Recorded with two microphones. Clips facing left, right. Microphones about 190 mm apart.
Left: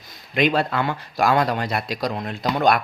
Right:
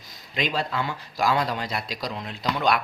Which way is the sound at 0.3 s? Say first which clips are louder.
Left 7 dB; 60° left (ahead or behind).